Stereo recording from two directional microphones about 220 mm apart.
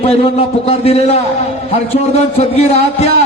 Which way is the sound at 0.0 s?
25° left (ahead or behind).